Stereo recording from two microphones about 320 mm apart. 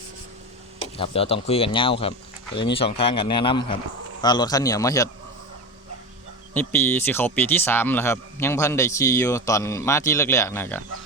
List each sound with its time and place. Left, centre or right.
0.9 s speech: centre
6.5 s speech: centre